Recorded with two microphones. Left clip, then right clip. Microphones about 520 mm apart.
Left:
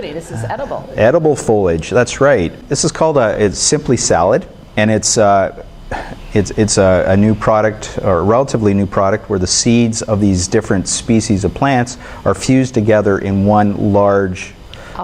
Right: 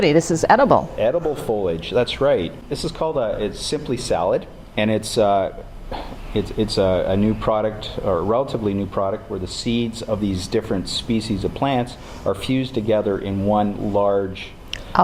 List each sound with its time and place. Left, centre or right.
0.0 s a woman's voice: right
0.9 s speech: left
14.9 s speech: right